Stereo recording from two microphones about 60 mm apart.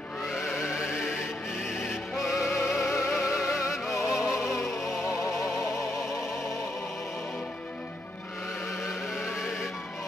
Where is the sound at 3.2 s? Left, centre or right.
Left.